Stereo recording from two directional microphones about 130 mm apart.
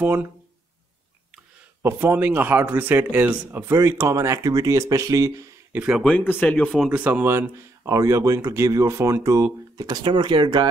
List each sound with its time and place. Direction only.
0.0 s speech: 15° right (ahead or behind)
1.8 s speech: 15° right (ahead or behind)
6.0 s speech: 10° left (ahead or behind)
6.9 s speech: 10° right (ahead or behind); by 10.7 s 35° right (ahead or behind)